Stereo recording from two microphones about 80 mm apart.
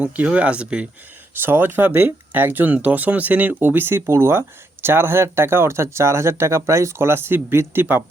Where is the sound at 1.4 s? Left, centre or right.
Right.